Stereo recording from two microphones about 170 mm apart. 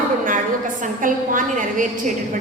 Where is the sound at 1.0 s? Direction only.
50° right (ahead or behind).